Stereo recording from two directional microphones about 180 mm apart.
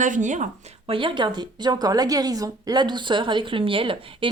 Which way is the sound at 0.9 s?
25° right (ahead or behind).